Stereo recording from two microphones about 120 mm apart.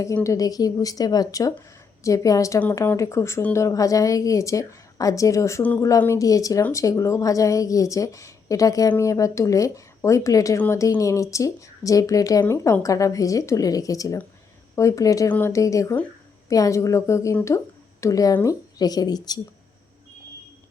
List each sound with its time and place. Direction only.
0.0 s speech: 25° left (ahead or behind)
2.6 s speech: 20° left (ahead or behind); by 19.4 s 35° left (ahead or behind)